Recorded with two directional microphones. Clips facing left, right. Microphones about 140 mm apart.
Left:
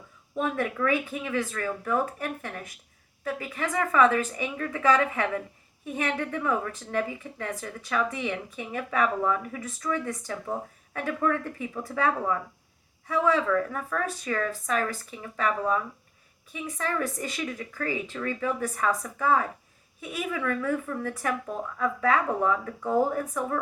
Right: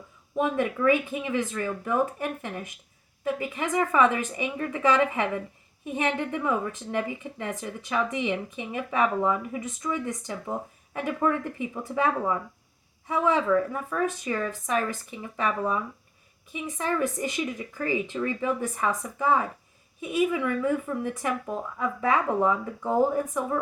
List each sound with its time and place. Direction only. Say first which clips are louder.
0.3 s a woman's voice: right 2 dB; 20° right (ahead or behind)